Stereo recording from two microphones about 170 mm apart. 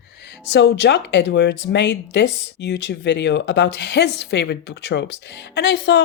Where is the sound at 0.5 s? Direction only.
90° left.